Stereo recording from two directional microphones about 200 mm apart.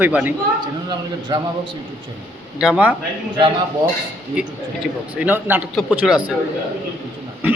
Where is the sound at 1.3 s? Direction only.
20° right (ahead or behind).